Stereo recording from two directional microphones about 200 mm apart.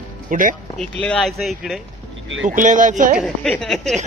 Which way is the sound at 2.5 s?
40° right (ahead or behind).